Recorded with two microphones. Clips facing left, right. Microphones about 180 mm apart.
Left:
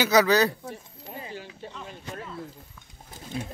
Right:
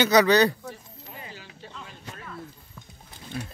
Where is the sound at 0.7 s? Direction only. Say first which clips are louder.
Left 1 dB; 25° left (ahead or behind).